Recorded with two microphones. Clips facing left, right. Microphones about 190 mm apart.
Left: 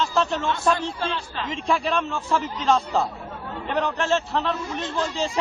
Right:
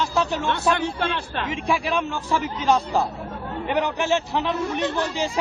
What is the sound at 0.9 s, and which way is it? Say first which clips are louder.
Speech: right 2 dB; 65° right (ahead or behind).